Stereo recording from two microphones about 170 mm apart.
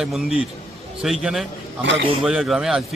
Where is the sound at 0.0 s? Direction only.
Centre (ahead or behind).